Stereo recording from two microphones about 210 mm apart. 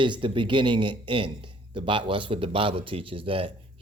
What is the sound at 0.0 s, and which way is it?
A man's voice, 20° right (ahead or behind).